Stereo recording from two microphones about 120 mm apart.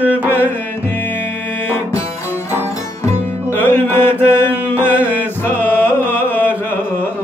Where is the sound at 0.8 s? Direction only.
15° left (ahead or behind).